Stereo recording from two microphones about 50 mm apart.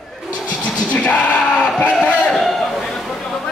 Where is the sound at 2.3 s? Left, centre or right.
Centre.